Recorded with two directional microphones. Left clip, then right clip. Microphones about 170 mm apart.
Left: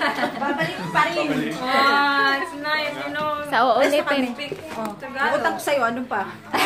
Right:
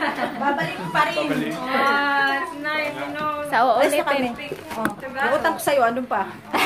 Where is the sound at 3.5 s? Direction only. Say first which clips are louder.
Even; 10° left (ahead or behind).